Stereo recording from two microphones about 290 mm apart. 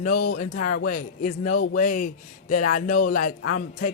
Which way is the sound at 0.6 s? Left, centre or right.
Left.